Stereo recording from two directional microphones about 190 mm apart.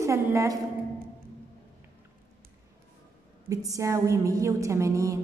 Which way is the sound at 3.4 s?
15° right (ahead or behind).